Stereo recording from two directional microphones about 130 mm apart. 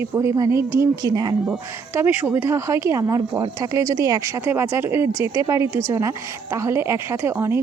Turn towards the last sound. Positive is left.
turn(degrees=-20)  # may be behind; listen again after turning